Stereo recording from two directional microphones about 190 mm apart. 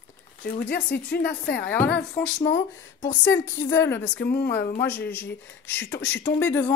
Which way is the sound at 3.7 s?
15° left (ahead or behind).